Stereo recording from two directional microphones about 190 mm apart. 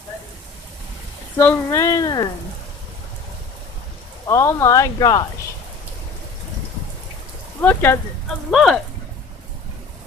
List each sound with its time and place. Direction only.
1.4 s speech: 15° left (ahead or behind)
4.3 s speech: 15° left (ahead or behind)
7.6 s speech: 10° left (ahead or behind)
8.4 s speech: centre (ahead or behind)